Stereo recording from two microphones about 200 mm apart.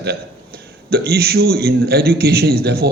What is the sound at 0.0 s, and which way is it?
A man's voice, 50° right (ahead or behind).